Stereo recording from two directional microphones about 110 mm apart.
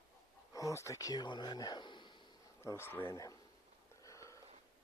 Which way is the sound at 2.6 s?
20° left (ahead or behind).